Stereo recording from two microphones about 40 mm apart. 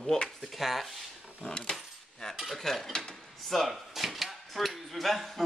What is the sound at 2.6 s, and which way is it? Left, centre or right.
Stir, centre.